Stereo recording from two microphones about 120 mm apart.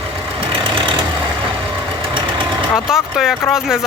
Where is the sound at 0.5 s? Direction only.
45° right (ahead or behind).